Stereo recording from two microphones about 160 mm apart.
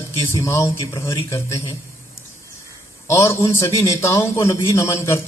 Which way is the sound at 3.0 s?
15° left (ahead or behind).